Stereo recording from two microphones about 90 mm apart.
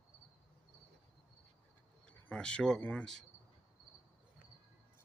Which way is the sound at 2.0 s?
10° left (ahead or behind).